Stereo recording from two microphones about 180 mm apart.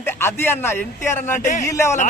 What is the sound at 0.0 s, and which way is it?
A man's voice, 15° left (ahead or behind).